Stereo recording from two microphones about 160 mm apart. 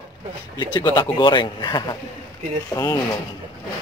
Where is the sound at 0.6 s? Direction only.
25° left (ahead or behind).